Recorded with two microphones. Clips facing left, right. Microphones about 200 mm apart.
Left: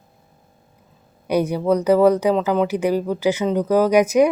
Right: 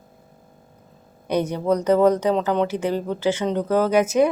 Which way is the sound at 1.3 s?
10° left (ahead or behind).